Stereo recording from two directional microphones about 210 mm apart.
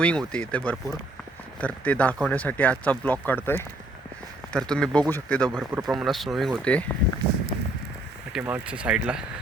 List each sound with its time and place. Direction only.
0.0 s speech: 5° left (ahead or behind)
8.3 s speech: 5° right (ahead or behind)